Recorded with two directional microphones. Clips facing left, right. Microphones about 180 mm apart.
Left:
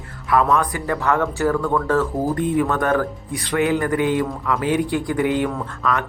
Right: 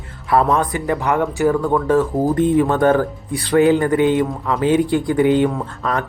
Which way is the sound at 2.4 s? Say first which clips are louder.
Right 7 dB; 30° right (ahead or behind).